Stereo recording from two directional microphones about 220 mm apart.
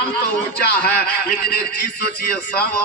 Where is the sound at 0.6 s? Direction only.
45° left (ahead or behind).